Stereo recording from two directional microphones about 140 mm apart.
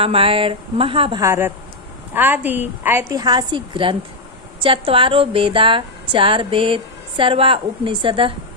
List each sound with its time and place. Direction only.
0.0 s speech: 40° right (ahead or behind)
1.2 s a woman's voice: 20° right (ahead or behind); by 8.3 s 35° right (ahead or behind)